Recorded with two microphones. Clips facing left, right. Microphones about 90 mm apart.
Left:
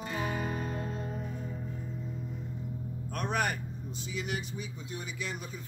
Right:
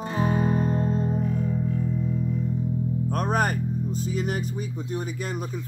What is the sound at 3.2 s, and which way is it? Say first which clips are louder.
Music: right 6 dB; 40° right (ahead or behind).